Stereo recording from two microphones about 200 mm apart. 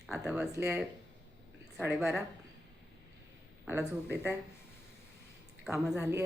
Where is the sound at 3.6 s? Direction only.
10° right (ahead or behind).